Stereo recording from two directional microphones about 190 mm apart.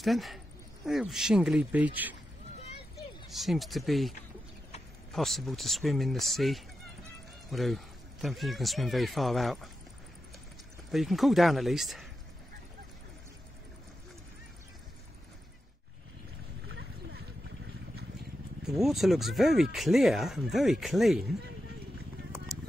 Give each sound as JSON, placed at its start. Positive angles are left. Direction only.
{"t": 0.0, "sound": "speech", "side_deg": 0}
{"t": 3.3, "sound": "speech", "side_deg": 0}
{"t": 5.1, "sound": "speech", "side_deg": 0}
{"t": 10.9, "sound": "speech", "side_deg": 0}
{"t": 16.6, "sound": "a sound", "side_deg": -70}
{"t": 18.6, "sound": "speech", "side_deg": 0}